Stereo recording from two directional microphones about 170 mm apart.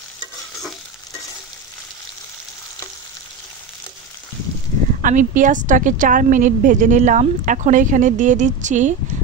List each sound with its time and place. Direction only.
5.0 s a woman's voice: 50° right (ahead or behind)